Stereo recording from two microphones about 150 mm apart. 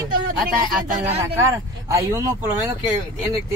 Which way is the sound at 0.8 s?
50° right (ahead or behind).